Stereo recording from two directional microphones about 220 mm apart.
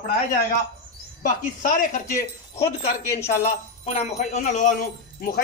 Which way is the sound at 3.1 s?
15° left (ahead or behind).